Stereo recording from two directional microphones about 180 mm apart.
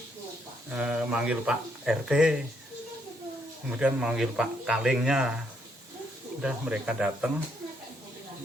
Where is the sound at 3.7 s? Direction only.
5° right (ahead or behind).